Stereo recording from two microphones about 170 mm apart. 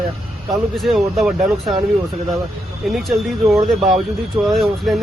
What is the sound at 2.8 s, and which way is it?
Speech, centre (ahead or behind).